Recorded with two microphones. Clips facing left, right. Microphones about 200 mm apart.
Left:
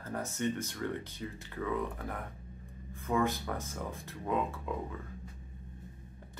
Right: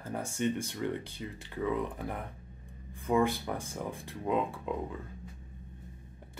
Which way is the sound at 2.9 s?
15° right (ahead or behind).